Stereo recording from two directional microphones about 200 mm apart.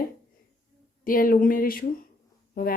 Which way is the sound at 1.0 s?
45° left (ahead or behind).